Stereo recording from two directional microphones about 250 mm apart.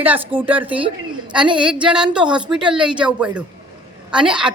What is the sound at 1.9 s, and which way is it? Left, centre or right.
A woman's voice, centre.